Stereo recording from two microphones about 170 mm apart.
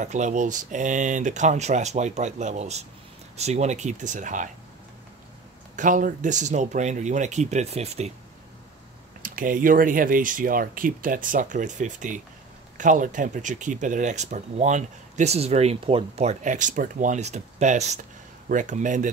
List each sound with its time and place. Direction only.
0.0 s speech: 45° right (ahead or behind)
5.8 s speech: 50° right (ahead or behind)
9.2 s speech: 55° right (ahead or behind)